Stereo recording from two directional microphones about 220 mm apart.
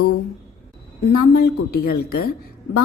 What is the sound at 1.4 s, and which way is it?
Speech, 45° left (ahead or behind).